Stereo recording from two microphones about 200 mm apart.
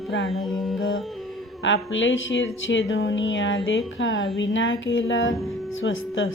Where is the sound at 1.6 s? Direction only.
70° left (ahead or behind).